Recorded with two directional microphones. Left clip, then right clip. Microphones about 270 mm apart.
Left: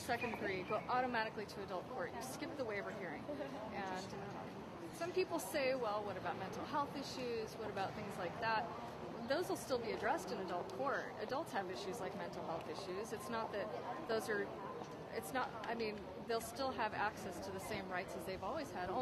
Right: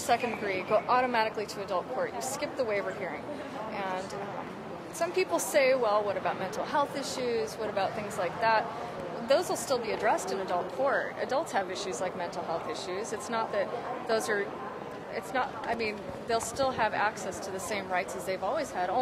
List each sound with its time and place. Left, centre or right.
0.1 s speech: right
5.0 s speech: centre
9.3 s a woman's voice: centre
10.9 s speech: centre
15.3 s a woman's voice: centre
16.3 s a woman's voice: centre